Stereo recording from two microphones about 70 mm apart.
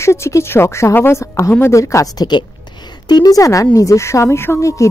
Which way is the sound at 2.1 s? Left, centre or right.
Left.